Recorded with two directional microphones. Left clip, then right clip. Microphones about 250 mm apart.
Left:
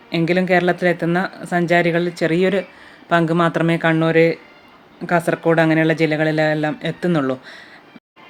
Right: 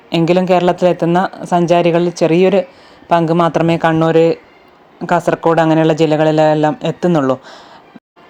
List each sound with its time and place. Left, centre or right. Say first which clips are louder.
0.1 s a woman's voice: right 5 dB; right